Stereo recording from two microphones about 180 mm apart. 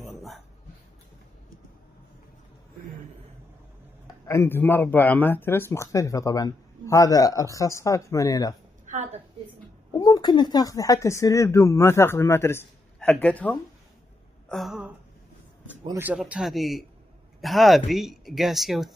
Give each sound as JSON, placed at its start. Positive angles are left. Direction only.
{"t": 4.3, "sound": "a man's voice", "side_deg": 10}
{"t": 9.9, "sound": "a man's voice", "side_deg": 20}
{"t": 15.9, "sound": "speech", "side_deg": -10}